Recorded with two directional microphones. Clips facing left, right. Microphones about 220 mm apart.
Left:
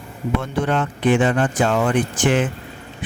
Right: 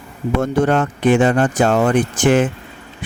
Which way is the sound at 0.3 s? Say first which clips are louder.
Right 6 dB; 45° right (ahead or behind).